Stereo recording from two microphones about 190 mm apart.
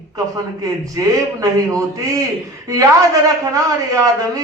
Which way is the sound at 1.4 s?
15° right (ahead or behind).